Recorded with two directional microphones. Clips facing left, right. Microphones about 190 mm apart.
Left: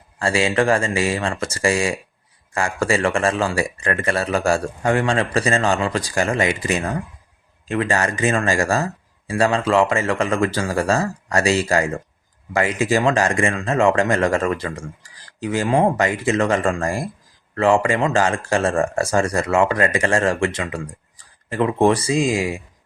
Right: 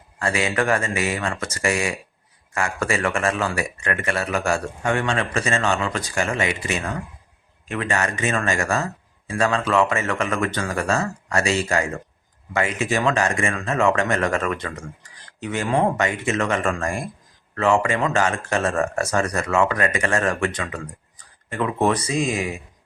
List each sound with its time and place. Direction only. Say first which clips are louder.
0.2 s speech: left 4 dB; 30° left (ahead or behind)